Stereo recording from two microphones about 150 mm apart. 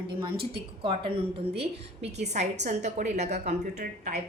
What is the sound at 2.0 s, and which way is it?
A woman's voice, 50° right (ahead or behind).